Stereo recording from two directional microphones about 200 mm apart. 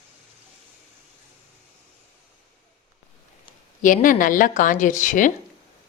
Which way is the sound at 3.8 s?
40° left (ahead or behind).